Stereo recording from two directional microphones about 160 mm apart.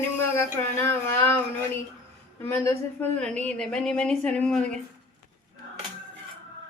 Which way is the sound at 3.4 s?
5° left (ahead or behind).